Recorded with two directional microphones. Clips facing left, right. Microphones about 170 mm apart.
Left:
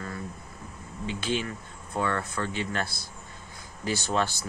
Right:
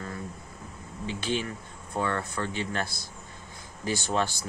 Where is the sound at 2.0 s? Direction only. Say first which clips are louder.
Left 1 dB; 15° right (ahead or behind).